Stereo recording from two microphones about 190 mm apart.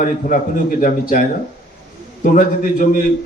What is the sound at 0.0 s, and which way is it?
A man's voice, 45° left (ahead or behind).